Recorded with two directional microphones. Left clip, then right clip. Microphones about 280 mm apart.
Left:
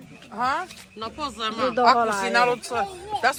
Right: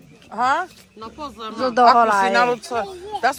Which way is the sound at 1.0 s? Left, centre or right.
Centre.